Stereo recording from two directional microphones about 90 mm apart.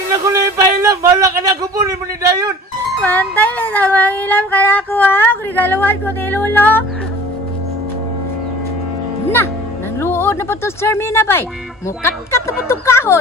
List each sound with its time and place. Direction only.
0.1 s a man's voice: 45° right (ahead or behind)
3.0 s music: 15° left (ahead or behind)
9.9 s music: 25° left (ahead or behind)